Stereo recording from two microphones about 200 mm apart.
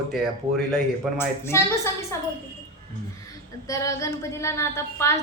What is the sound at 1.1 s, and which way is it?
A woman's voice, 10° left (ahead or behind).